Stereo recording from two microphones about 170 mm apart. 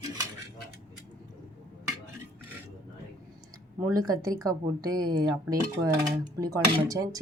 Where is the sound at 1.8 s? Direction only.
15° right (ahead or behind).